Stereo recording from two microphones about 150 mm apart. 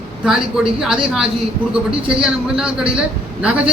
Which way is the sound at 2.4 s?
5° right (ahead or behind).